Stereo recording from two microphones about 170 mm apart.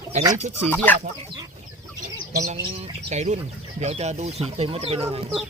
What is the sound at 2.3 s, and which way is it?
Speech, 50° right (ahead or behind).